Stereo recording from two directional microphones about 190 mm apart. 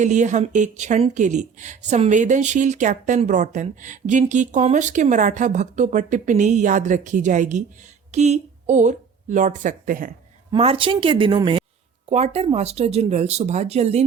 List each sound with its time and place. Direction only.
0.0 s a woman's voice: 40° right (ahead or behind)
10.5 s a woman's voice: 30° right (ahead or behind)